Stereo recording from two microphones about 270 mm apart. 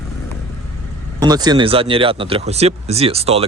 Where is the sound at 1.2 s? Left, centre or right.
Centre.